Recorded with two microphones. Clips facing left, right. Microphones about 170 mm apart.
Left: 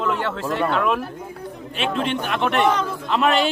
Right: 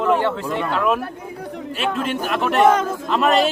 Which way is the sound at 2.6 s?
45° right (ahead or behind).